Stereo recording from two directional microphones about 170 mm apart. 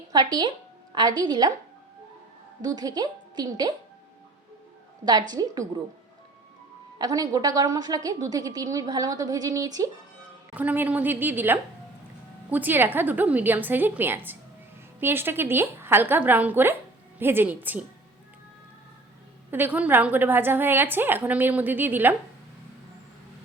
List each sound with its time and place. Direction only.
0.1 s a woman's voice: 25° right (ahead or behind)
2.6 s a woman's voice: 20° right (ahead or behind)
5.3 s a woman's voice: 20° right (ahead or behind)
7.0 s a woman's voice: 20° right (ahead or behind)
10.5 s a woman's voice: 10° right (ahead or behind)
19.5 s a woman's voice: 10° right (ahead or behind)